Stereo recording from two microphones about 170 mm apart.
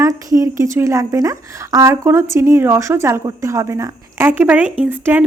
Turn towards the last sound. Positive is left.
turn(degrees=-10)  # may be behind; listen again after turning